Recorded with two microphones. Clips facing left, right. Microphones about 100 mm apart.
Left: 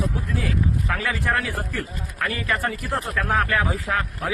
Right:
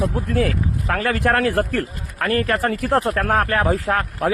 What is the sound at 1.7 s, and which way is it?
A man's voice, 45° right (ahead or behind).